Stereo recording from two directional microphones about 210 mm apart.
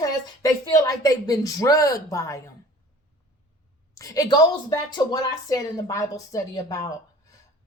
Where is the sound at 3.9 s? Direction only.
15° left (ahead or behind).